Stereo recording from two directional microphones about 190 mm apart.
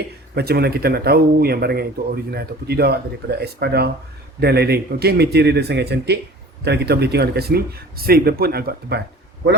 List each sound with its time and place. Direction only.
0.3 s speech: 55° right (ahead or behind)